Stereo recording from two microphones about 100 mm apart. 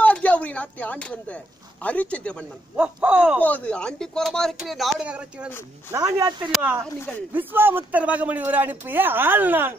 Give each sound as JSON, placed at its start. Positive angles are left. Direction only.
{"t": 0.0, "sound": "speech", "side_deg": 15}
{"t": 2.7, "sound": "speech", "side_deg": -15}
{"t": 3.3, "sound": "speech", "side_deg": 15}
{"t": 5.0, "sound": "speech", "side_deg": -10}
{"t": 5.9, "sound": "a man's voice", "side_deg": -25}
{"t": 7.3, "sound": "a man's voice", "side_deg": -20}